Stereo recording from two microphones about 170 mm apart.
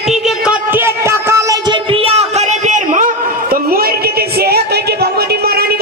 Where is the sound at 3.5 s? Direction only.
60° right (ahead or behind).